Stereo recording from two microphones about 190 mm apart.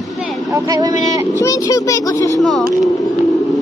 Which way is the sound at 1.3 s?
15° left (ahead or behind).